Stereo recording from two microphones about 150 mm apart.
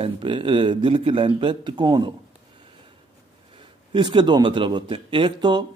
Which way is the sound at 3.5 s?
30° right (ahead or behind).